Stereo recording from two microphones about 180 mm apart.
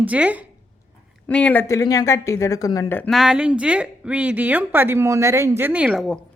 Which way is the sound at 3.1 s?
Centre (ahead or behind).